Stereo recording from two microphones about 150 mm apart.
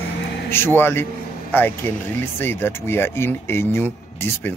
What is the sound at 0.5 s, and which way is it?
Speech, 15° left (ahead or behind).